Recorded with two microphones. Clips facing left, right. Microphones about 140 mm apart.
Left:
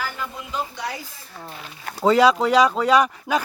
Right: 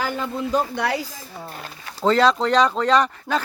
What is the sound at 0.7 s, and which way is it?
Speech, 70° right (ahead or behind).